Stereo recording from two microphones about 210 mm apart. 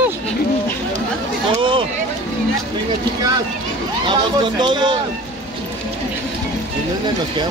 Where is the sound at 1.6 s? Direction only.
25° right (ahead or behind).